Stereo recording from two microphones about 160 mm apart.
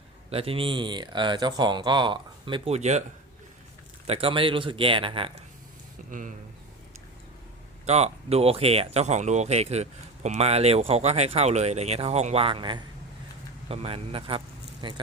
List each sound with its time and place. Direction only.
0.3 s speech: 35° right (ahead or behind)
4.0 s speech: 35° right (ahead or behind)
6.1 s speech: 55° right (ahead or behind)
7.9 s speech: 40° right (ahead or behind)